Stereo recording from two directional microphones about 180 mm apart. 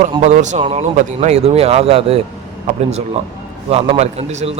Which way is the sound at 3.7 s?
35° right (ahead or behind).